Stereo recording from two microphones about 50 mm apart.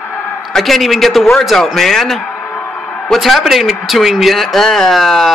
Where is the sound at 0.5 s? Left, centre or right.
Centre.